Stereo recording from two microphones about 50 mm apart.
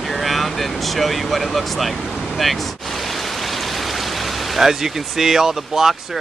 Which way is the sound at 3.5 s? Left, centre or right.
Centre.